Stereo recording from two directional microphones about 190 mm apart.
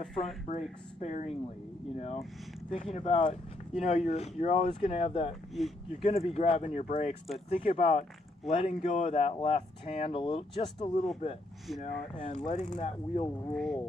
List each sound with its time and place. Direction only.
0.1 s speech: centre (ahead or behind)
0.5 s speech: 35° left (ahead or behind)
5.6 s speech: centre (ahead or behind)
6.0 s speech: 35° left (ahead or behind)
13.5 s speech: centre (ahead or behind)